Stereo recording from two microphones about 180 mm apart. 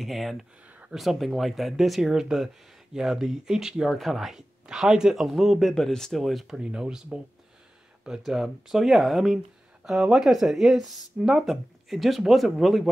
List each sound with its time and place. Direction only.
0.0 s speech: centre (ahead or behind)